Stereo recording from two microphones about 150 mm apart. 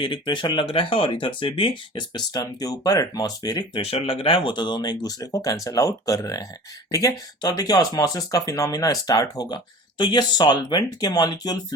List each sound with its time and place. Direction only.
0.0 s speech: 35° left (ahead or behind)
3.8 s speech: 45° left (ahead or behind); by 11.5 s 25° left (ahead or behind)